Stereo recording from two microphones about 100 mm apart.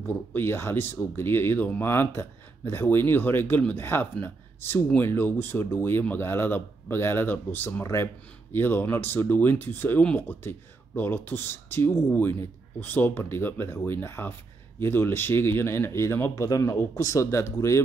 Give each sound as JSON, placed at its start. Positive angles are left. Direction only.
{"t": 0.0, "sound": "speech", "side_deg": 20}